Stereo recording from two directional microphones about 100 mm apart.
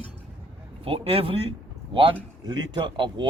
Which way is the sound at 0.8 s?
70° right (ahead or behind).